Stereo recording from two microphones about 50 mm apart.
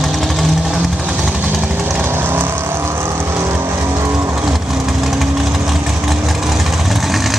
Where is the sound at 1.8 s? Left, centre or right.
Right.